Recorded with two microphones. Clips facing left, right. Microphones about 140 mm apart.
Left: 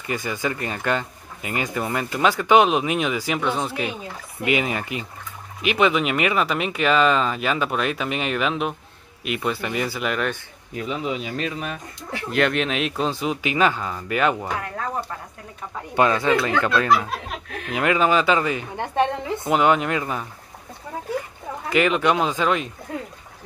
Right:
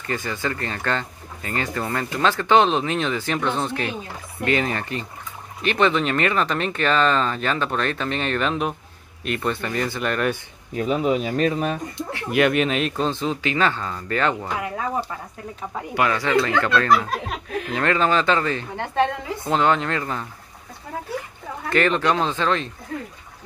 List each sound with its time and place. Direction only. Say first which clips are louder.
0.0 s speech: left 1 dB; 15° left (ahead or behind)
10.8 s speech: right 6 dB; 40° right (ahead or behind)
12.3 s speech: right 3 dB; 5° right (ahead or behind); by 14.5 s 10° left (ahead or behind)
16.0 s speech: left 2 dB; 25° left (ahead or behind)
21.6 s speech: even; 10° left (ahead or behind)